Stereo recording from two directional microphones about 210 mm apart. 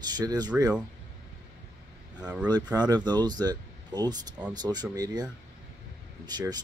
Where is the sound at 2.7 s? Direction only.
20° right (ahead or behind).